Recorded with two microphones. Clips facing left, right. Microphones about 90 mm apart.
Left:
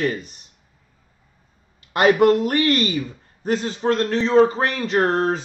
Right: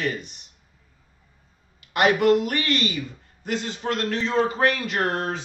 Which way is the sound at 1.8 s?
35° left (ahead or behind).